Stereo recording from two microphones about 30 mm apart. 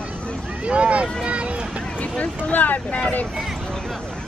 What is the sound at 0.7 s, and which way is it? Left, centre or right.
Speech, right.